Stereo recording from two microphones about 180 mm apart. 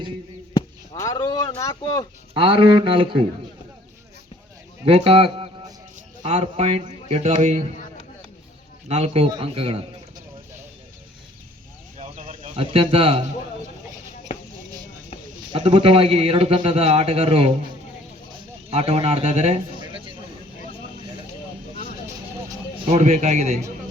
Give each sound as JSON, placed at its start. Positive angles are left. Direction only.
{"t": 0.9, "sound": "speech", "side_deg": 20}
{"t": 2.3, "sound": "speech", "side_deg": -30}
{"t": 4.9, "sound": "a man's voice", "side_deg": -30}
{"t": 8.9, "sound": "a man's voice", "side_deg": -30}
{"t": 11.9, "sound": "bird", "side_deg": -40}
{"t": 15.7, "sound": "a man's voice", "side_deg": -30}
{"t": 18.7, "sound": "a man's voice", "side_deg": -35}
{"t": 22.9, "sound": "a man's voice", "side_deg": -40}